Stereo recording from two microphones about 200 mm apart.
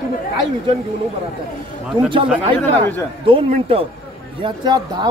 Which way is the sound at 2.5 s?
10° left (ahead or behind).